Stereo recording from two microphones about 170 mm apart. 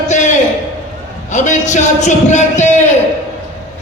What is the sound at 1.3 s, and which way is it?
A man's voice, 45° left (ahead or behind).